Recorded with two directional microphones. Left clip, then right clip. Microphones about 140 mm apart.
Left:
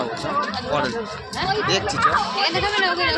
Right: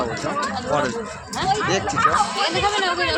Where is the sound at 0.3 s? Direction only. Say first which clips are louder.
Even; 30° right (ahead or behind).